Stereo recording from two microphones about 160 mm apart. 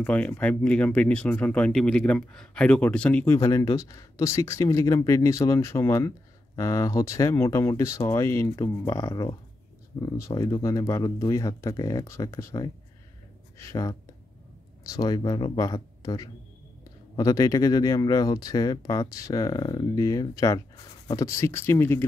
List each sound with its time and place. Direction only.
0.0 s speech: 10° left (ahead or behind)
3.3 s speech: 20° left (ahead or behind)